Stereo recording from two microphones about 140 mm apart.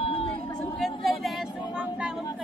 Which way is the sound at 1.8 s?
5° right (ahead or behind).